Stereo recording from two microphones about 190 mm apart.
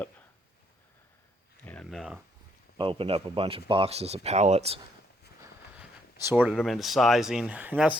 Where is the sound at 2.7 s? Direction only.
25° right (ahead or behind).